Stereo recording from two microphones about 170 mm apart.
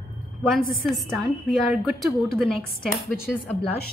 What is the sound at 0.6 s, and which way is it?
Speech, 60° left (ahead or behind).